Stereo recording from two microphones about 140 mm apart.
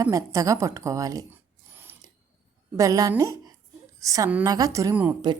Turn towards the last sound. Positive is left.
turn(degrees=-10)  # may be behind; listen again after turning